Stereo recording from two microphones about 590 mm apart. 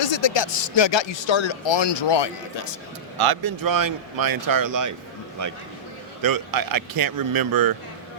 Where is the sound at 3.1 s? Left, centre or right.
Right.